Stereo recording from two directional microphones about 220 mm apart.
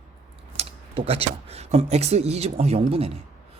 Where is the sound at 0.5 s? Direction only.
25° right (ahead or behind).